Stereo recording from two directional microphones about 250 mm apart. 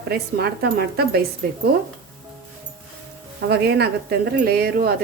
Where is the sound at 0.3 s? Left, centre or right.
Right.